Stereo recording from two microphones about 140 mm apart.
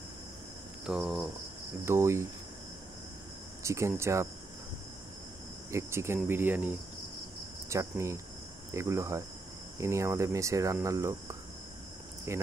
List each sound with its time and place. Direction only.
0.8 s cricket: centre (ahead or behind)
1.9 s speech: 20° right (ahead or behind)
3.6 s speech: 20° right (ahead or behind)
5.7 s cricket: 20° right (ahead or behind)
7.7 s speech: 20° right (ahead or behind)